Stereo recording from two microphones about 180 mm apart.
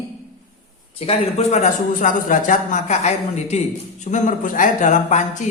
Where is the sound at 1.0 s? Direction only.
35° left (ahead or behind).